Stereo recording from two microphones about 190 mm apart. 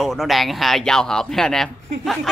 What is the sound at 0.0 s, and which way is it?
A man's voice, centre (ahead or behind).